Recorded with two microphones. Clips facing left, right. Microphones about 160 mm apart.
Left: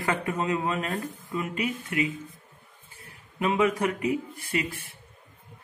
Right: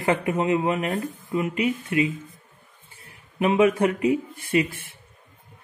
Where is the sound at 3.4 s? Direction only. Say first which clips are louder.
Right 5 dB; 20° right (ahead or behind).